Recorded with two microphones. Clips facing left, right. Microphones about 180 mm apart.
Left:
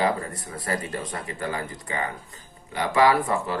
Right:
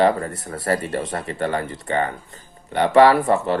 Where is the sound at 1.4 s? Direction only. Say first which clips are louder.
Right 7 dB; 70° right (ahead or behind).